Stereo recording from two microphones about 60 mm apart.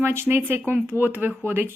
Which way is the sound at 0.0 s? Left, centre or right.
Right.